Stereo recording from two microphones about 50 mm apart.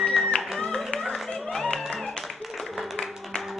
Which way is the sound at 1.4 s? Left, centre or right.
Centre.